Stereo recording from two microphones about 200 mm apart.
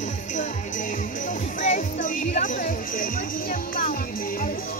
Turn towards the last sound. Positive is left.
turn(degrees=45)  # may be behind; listen again after turning